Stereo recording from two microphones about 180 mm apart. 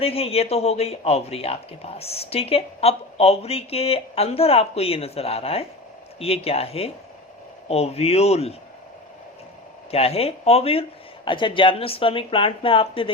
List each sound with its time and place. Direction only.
0.0 s speech: 35° left (ahead or behind)
9.9 s a woman's voice: 35° left (ahead or behind)